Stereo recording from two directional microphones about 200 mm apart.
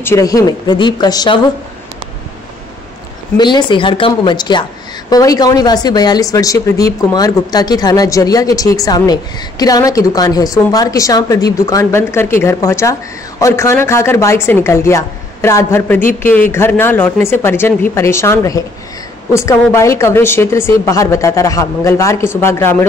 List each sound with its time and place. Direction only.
0.0 s speech: 15° left (ahead or behind)
3.3 s speech: 20° left (ahead or behind)